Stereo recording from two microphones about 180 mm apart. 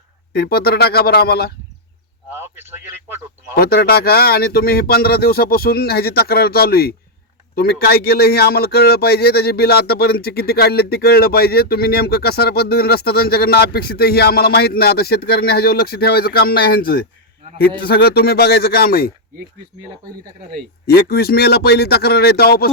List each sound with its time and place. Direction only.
0.3 s speech: 60° left (ahead or behind)
2.4 s speech: 15° right (ahead or behind)
3.5 s speech: 60° left (ahead or behind)
20.8 s speech: 60° left (ahead or behind)